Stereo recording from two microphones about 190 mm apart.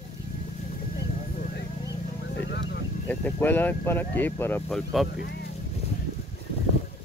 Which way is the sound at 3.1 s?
10° left (ahead or behind).